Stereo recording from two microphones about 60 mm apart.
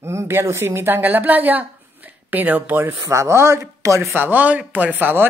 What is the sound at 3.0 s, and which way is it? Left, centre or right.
Speech, right.